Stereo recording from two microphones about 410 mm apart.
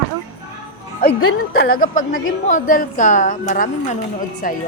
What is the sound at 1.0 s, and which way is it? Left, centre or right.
A woman's voice, left.